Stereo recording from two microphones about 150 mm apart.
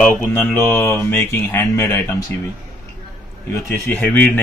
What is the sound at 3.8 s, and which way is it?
Speech, 15° left (ahead or behind).